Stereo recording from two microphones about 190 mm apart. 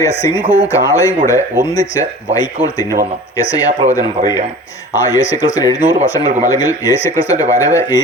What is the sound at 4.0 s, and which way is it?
Speech, 20° left (ahead or behind).